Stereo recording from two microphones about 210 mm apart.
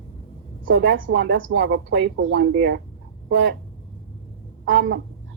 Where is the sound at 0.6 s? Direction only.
55° right (ahead or behind).